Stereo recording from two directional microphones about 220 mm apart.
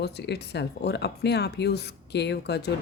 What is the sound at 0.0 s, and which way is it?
Speech, 50° left (ahead or behind).